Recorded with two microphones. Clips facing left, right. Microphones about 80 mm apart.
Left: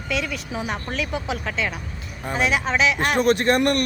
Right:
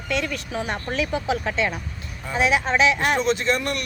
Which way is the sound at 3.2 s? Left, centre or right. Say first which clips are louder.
Left 4 dB; left.